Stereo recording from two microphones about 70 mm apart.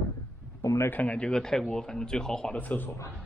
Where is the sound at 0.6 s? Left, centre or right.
Left.